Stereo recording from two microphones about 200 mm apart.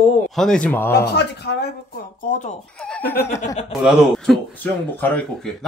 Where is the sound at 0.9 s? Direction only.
55° left (ahead or behind).